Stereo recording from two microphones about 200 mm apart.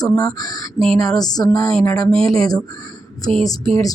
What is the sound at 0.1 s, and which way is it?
Speech, 15° left (ahead or behind).